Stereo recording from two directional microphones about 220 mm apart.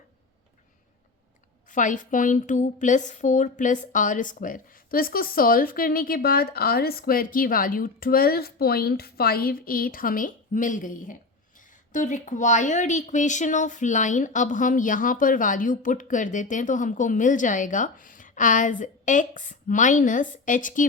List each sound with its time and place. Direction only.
1.7 s a woman's voice: 35° left (ahead or behind)